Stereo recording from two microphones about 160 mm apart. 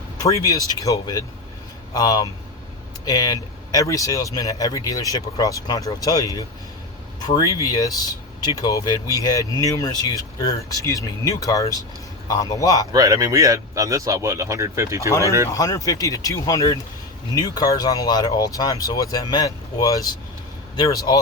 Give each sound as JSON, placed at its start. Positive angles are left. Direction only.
{"t": 0.2, "sound": "speech", "side_deg": 20}
{"t": 12.9, "sound": "speech", "side_deg": -20}
{"t": 15.5, "sound": "speech", "side_deg": 20}